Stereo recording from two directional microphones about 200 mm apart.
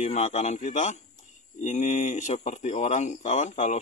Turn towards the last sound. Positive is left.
turn(degrees=35)  # may be behind; listen again after turning